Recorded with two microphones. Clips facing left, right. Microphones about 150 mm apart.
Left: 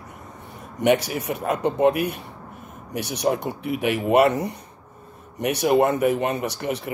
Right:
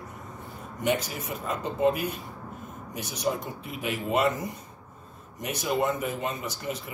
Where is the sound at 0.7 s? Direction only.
70° left (ahead or behind).